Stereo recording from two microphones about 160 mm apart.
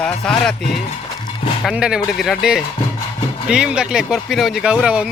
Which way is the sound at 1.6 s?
5° right (ahead or behind).